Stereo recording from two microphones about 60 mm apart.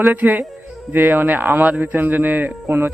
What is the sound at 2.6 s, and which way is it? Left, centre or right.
Speech, right.